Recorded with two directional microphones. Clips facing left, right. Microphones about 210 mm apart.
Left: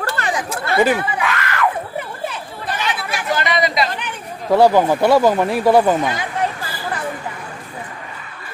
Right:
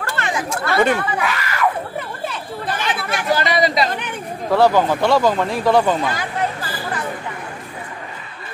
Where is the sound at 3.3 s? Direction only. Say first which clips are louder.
Right 2 dB; 35° right (ahead or behind).